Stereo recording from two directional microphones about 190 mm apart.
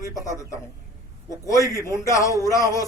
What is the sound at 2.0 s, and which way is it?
Speech, 15° left (ahead or behind).